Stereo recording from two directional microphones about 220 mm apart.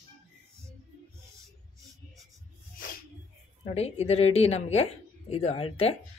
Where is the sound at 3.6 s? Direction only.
30° left (ahead or behind).